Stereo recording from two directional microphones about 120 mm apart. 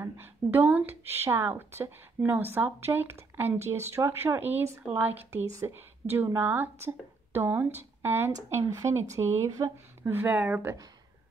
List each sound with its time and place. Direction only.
0.0 s a woman's voice: 15° right (ahead or behind)